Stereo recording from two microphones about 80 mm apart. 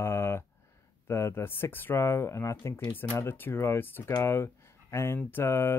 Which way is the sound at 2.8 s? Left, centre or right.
Centre.